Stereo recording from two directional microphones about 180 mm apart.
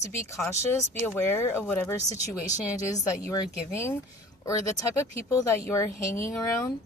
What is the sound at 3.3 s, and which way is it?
A woman's voice, 15° left (ahead or behind).